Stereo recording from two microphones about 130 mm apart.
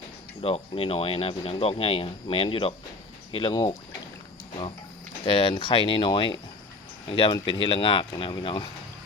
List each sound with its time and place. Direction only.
0.7 s speech: 45° left (ahead or behind)
5.2 s speech: 40° left (ahead or behind)